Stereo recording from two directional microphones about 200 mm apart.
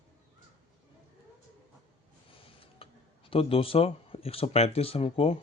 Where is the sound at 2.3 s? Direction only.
25° left (ahead or behind).